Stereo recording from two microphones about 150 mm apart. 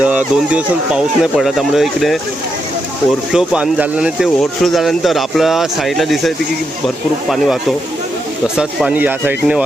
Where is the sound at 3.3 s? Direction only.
5° right (ahead or behind).